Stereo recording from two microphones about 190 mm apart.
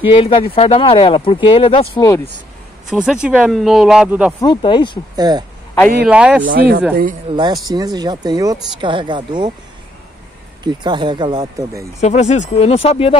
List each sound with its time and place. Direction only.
0.0 s speech: 30° left (ahead or behind)
2.9 s speech: 5° right (ahead or behind)
4.6 s speech: 25° left (ahead or behind)
5.1 s speech: 20° right (ahead or behind)
6.0 s speech: 5° right (ahead or behind)
6.4 s speech: 50° right (ahead or behind)
7.2 s speech: 25° right (ahead or behind)
10.6 s speech: 25° right (ahead or behind)
12.0 s speech: 35° left (ahead or behind)